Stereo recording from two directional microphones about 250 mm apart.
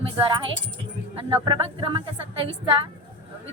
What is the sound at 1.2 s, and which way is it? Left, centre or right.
A man's voice, centre.